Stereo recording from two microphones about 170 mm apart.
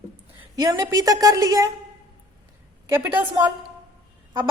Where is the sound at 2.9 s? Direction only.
10° right (ahead or behind).